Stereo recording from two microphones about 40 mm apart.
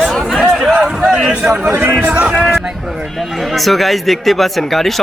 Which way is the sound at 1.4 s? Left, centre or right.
Centre.